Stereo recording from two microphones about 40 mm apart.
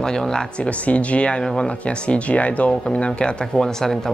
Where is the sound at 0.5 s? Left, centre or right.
Left.